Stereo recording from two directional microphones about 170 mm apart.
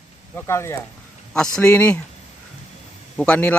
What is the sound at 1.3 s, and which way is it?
Speech, 5° left (ahead or behind).